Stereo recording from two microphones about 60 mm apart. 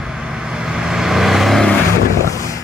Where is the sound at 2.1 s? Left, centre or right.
Left.